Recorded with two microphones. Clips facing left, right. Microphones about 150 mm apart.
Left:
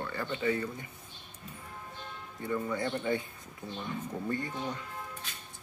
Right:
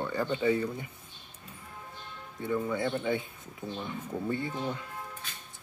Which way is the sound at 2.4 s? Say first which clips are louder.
Right 2 dB; 10° right (ahead or behind).